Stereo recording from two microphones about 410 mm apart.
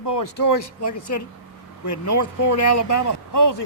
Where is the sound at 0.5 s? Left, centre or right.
Left.